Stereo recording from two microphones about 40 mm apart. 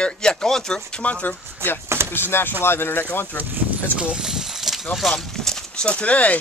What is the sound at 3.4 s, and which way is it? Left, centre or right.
Speech, right.